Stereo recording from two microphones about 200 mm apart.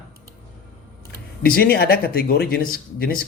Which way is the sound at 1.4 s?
50° left (ahead or behind).